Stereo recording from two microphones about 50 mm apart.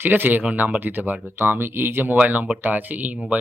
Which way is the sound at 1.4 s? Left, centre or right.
Right.